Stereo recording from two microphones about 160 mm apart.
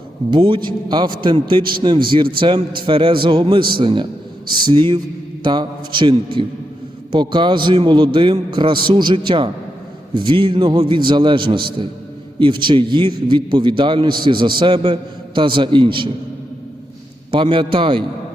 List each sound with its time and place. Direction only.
0.3 s a man's voice: 30° right (ahead or behind)
17.3 s a man's voice: 30° right (ahead or behind)